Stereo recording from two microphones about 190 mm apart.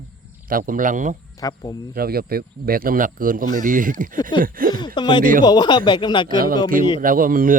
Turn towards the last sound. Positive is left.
turn(degrees=-45)  # may be behind; listen again after turning